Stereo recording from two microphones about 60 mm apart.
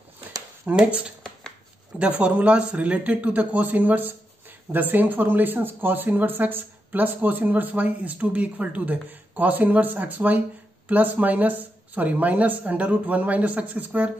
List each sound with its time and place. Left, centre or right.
0.7 s speech: centre